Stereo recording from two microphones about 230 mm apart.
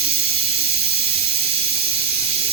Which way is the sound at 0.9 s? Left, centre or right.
Right.